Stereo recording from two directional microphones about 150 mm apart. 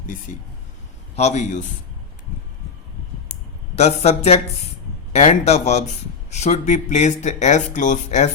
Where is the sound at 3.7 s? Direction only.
45° left (ahead or behind).